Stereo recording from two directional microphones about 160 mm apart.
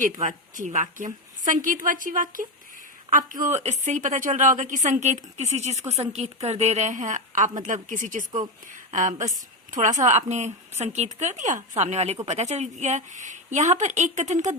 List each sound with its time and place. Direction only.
0.0 s a woman's voice: 55° right (ahead or behind)
3.4 s a woman's voice: 45° right (ahead or behind)